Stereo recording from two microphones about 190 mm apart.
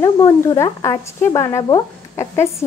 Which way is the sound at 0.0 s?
20° left (ahead or behind).